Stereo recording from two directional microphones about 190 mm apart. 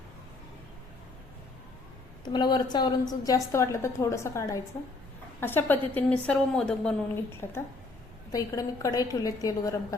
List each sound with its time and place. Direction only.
2.2 s a woman's voice: 20° left (ahead or behind)